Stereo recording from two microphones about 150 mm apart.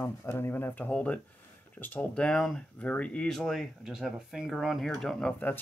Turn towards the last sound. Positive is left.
turn(degrees=10)  # may be behind; listen again after turning